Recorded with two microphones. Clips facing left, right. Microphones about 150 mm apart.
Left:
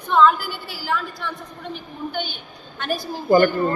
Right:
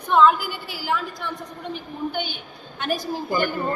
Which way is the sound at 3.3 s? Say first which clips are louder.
Left 10 dB; 50° left (ahead or behind).